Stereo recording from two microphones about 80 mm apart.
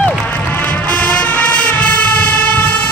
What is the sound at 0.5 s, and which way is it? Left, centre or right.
Music, centre.